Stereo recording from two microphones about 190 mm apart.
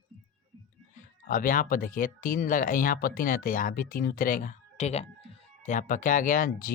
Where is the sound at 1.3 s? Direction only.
45° left (ahead or behind).